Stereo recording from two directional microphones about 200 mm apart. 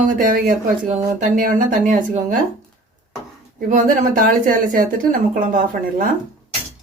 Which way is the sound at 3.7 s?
40° right (ahead or behind).